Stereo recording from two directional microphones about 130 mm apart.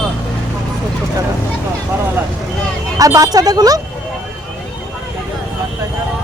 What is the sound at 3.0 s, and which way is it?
Speech, 25° right (ahead or behind).